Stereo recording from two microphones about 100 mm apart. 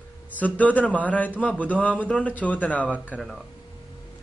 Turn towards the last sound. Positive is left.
turn(degrees=5)  # may be behind; listen again after turning